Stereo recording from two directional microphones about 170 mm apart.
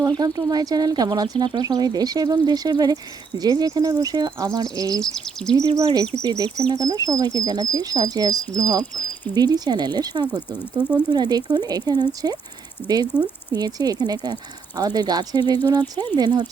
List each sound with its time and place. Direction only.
0.0 s speech: 20° right (ahead or behind)
5.1 s speech: 5° left (ahead or behind)
5.7 s speech: 20° right (ahead or behind)
13.1 s speech: 10° left (ahead or behind)
13.5 s speech: 20° right (ahead or behind)